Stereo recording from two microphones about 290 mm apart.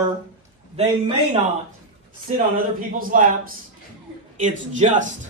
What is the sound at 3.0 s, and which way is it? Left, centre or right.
A man's voice, right.